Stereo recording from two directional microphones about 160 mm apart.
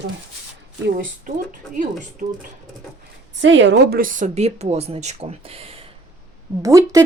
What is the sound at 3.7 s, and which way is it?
Speech, 80° right.